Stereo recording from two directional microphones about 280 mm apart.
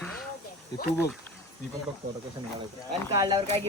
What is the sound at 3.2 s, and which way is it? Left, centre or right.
Speech, centre.